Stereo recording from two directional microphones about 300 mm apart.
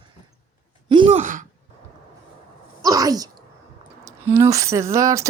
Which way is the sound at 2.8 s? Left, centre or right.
Centre.